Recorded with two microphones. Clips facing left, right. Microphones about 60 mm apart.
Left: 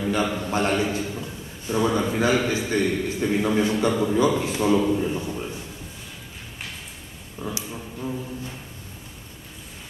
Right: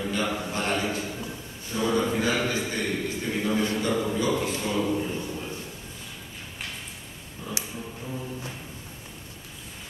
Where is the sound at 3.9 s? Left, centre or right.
Centre.